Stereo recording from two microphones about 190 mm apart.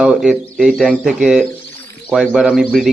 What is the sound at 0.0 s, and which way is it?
Speech, 5° right (ahead or behind).